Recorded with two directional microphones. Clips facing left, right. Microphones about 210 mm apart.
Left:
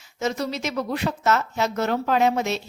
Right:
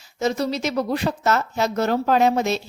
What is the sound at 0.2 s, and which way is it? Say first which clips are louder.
Speech: right 4 dB; 35° right (ahead or behind).